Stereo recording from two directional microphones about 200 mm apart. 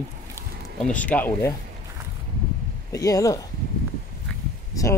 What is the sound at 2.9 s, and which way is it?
Speech, 15° left (ahead or behind).